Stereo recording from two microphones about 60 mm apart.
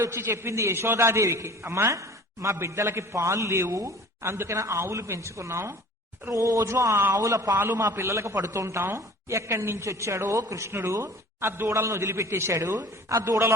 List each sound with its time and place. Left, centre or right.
0.1 s a man's voice: right
3.8 s speech: right
4.3 s speech: right
4.5 s a man's voice: right
6.3 s speech: right
6.7 s a man's voice: right
7.1 s a man's voice: right
7.5 s a man's voice: right
10.7 s speech: right
11.7 s a man's voice: right
12.7 s speech: right